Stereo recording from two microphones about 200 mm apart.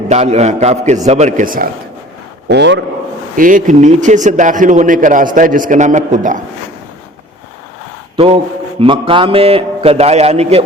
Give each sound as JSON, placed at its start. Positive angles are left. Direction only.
{"t": 0.1, "sound": "a man's voice", "side_deg": -35}
{"t": 2.5, "sound": "a man's voice", "side_deg": -60}
{"t": 3.3, "sound": "a man's voice", "side_deg": -40}
{"t": 8.1, "sound": "a man's voice", "side_deg": -30}